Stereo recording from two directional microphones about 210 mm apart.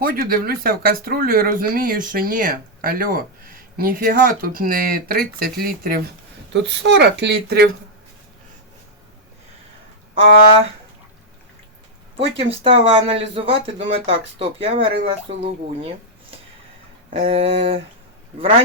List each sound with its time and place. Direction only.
0.0 s speech: 45° right (ahead or behind)
12.1 s speech: 25° right (ahead or behind)
17.2 s speech: 25° right (ahead or behind)